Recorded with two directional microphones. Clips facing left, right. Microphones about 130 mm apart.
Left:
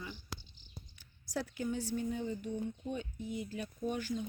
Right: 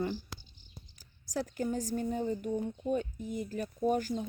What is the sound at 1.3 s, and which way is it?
Speech, 40° right (ahead or behind).